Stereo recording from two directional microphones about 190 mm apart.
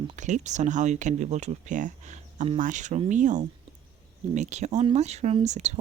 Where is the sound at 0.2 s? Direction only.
40° right (ahead or behind).